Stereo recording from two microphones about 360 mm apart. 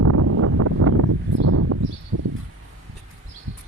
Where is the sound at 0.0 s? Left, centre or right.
Right.